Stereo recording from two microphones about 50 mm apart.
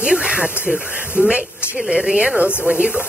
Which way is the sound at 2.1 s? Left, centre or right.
Right.